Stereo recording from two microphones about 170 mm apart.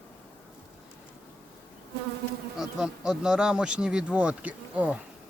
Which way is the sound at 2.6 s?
5° right (ahead or behind).